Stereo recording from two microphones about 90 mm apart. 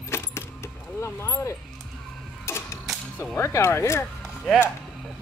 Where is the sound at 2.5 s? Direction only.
30° left (ahead or behind).